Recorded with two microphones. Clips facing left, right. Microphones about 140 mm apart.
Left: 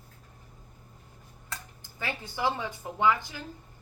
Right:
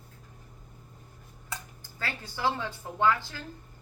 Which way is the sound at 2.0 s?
15° left (ahead or behind).